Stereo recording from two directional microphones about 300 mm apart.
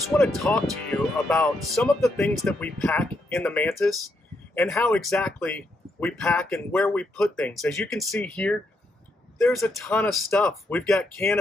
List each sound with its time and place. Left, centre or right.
0.4 s speech: centre